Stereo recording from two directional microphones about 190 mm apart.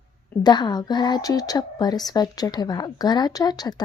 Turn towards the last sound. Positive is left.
turn(degrees=20)  # may be behind; listen again after turning